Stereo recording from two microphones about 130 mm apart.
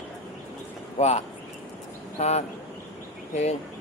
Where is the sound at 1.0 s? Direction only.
60° left (ahead or behind).